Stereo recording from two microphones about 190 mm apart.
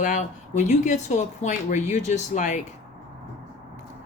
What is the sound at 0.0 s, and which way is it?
Speech, 40° left (ahead or behind).